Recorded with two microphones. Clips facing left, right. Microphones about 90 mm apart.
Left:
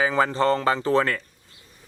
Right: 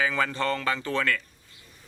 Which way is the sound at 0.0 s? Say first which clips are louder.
Left 6 dB; 30° left (ahead or behind).